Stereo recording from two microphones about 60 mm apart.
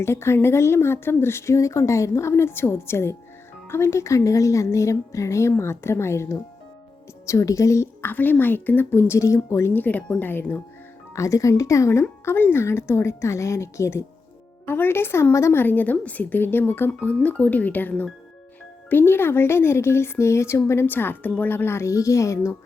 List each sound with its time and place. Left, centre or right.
0.0 s speech: left
7.3 s speech: left
8.0 s speech: left
9.1 s speech: left
9.7 s speech: left
11.1 s speech: left
12.2 s speech: left
14.7 s speech: left
15.5 s speech: left
17.2 s speech: left
20.9 s speech: left
21.8 s speech: left